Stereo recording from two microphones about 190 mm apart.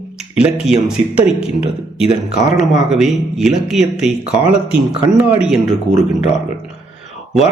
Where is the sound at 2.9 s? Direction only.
Centre (ahead or behind).